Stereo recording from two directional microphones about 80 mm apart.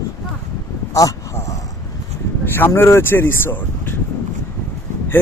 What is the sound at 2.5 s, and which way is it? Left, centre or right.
Speech, left.